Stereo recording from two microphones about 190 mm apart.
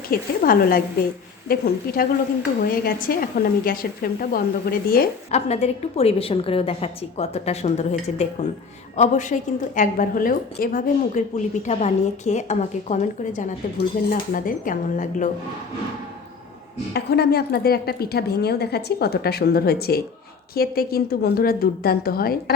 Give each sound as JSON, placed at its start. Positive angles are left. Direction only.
{"t": 0.1, "sound": "a woman's voice", "side_deg": 50}
{"t": 5.3, "sound": "a woman's voice", "side_deg": 35}
{"t": 16.9, "sound": "a woman's voice", "side_deg": 60}